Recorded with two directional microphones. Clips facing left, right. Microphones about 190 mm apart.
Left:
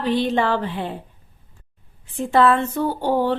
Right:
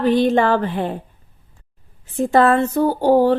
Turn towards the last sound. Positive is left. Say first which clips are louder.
# right 6 dB
turn(degrees=-40)  # may be behind; listen again after turning